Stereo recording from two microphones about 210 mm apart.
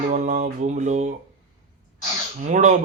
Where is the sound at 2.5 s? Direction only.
35° right (ahead or behind).